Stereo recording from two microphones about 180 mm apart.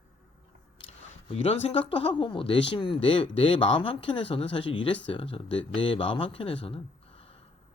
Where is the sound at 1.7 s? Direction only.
30° left (ahead or behind).